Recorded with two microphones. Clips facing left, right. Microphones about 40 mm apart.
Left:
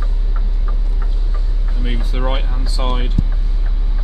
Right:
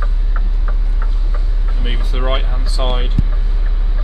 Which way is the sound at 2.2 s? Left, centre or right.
Right.